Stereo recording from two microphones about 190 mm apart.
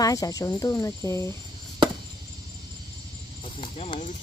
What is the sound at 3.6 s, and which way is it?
Speech, 30° left (ahead or behind).